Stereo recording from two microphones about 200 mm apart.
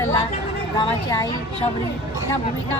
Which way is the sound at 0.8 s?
25° left (ahead or behind).